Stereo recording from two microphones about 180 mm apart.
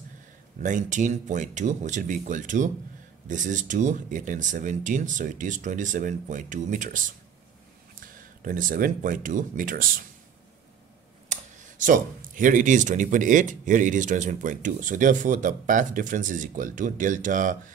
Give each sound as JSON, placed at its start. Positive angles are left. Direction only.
{"t": 0.6, "sound": "speech", "side_deg": -45}
{"t": 8.0, "sound": "speech", "side_deg": -50}
{"t": 11.2, "sound": "speech", "side_deg": -45}